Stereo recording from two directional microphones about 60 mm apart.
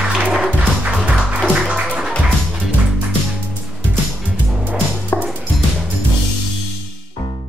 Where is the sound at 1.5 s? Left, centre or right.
Centre.